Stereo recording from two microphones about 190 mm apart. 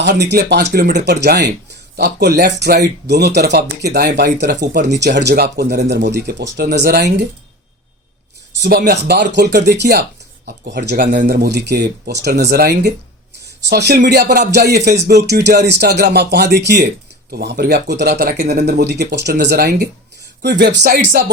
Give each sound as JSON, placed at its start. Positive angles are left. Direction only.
{"t": 0.0, "sound": "speech", "side_deg": -65}
{"t": 8.6, "sound": "speech", "side_deg": -60}